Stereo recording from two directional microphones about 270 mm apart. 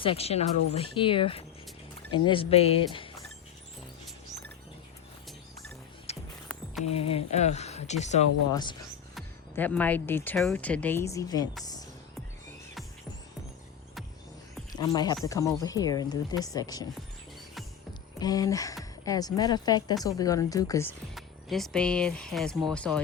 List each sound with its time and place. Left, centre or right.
0.0 s speech: left
6.1 s music: left
6.8 s speech: left
9.1 s speech: centre
11.6 s music: centre
14.7 s speech: centre
18.2 s speech: centre
21.2 s speech: centre